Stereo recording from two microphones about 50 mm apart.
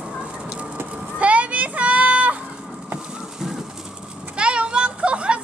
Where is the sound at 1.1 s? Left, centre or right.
Right.